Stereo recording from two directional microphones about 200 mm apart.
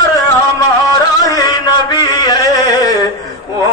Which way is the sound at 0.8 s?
20° left (ahead or behind).